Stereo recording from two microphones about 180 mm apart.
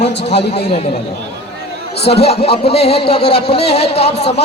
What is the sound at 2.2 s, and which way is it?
Speech, 35° left (ahead or behind).